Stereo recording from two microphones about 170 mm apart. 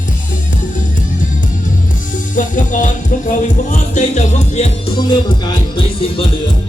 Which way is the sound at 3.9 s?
45° left (ahead or behind).